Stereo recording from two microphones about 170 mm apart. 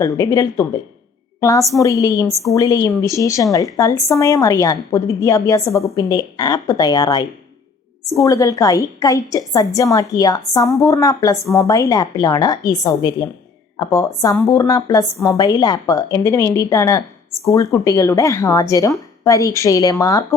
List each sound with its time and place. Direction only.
0.0 s a woman's voice: 20° left (ahead or behind)